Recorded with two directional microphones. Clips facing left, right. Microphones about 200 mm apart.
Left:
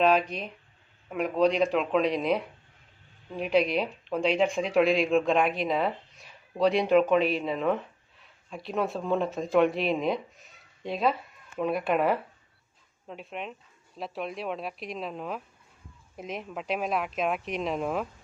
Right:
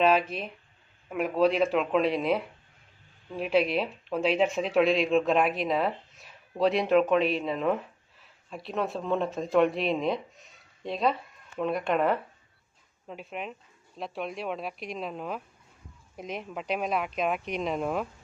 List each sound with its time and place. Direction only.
0.0 s speech: centre (ahead or behind)